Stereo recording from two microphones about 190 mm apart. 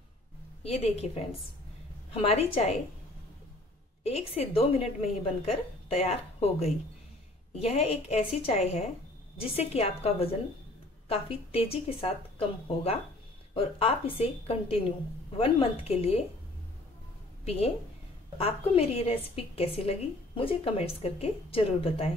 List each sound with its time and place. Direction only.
0.7 s a woman's voice: 35° left (ahead or behind)
4.0 s a woman's voice: 30° left (ahead or behind)
17.5 s a woman's voice: 35° left (ahead or behind)